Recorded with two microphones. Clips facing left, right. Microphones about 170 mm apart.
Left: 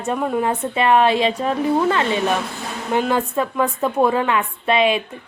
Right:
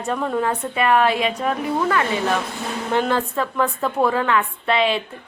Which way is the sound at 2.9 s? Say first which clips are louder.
Left 2 dB; 10° left (ahead or behind).